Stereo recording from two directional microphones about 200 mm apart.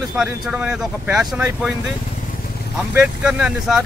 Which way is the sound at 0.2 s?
5° right (ahead or behind).